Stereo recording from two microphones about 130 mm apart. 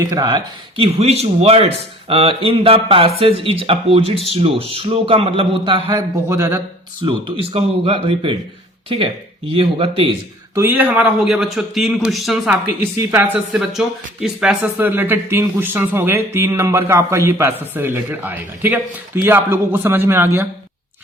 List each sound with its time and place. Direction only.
0.0 s speech: 30° right (ahead or behind)
0.9 s speech: 50° right (ahead or behind)
5.9 s a man's voice: 20° right (ahead or behind)
7.0 s speech: 45° right (ahead or behind)
9.6 s speech: 45° right (ahead or behind)
10.5 s a man's voice: 15° right (ahead or behind); by 12.5 s centre (ahead or behind)
12.8 s speech: 20° right (ahead or behind)